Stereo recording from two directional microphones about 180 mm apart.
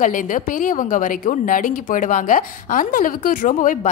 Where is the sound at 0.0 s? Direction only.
45° left (ahead or behind).